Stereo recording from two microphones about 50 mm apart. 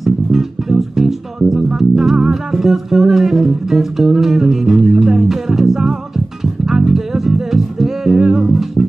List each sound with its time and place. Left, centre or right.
0.0 s music: centre